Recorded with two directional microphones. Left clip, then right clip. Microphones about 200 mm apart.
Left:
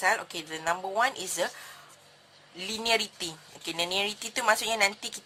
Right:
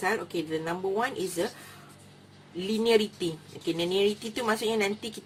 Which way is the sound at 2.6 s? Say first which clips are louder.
Right 3 dB; 50° left (ahead or behind).